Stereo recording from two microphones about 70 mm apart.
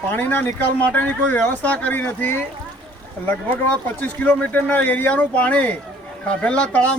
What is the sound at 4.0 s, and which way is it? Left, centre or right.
Speech, left.